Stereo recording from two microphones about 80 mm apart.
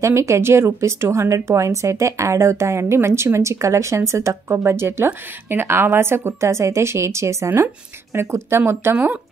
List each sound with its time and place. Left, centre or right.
0.0 s a woman's voice: right
8.9 s speech: right